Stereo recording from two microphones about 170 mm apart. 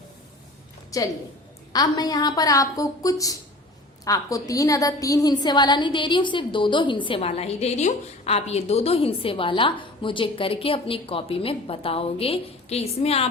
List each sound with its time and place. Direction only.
0.9 s a woman's voice: 20° left (ahead or behind); by 13.2 s 35° left (ahead or behind)